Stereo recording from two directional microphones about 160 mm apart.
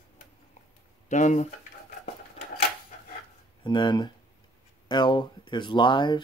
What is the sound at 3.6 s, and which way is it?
Speech, 30° left (ahead or behind).